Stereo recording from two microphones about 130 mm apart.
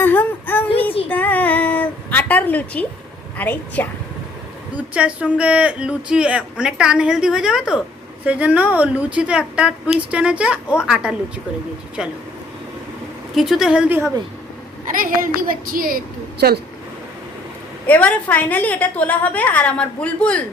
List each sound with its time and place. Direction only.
0.0 s child singing: 15° left (ahead or behind)
1.1 s a sound: 10° left (ahead or behind)
3.3 s a woman's voice: 15° left (ahead or behind)
4.7 s a woman's voice: 10° right (ahead or behind)
13.3 s a woman's voice: centre (ahead or behind)
14.9 s a woman's voice: 90° right
17.8 s a woman's voice: 10° left (ahead or behind)